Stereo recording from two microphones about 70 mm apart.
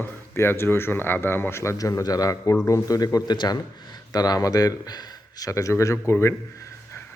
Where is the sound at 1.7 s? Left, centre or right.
Left.